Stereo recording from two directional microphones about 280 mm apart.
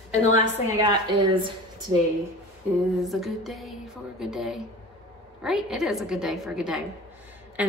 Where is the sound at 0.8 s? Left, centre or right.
Centre.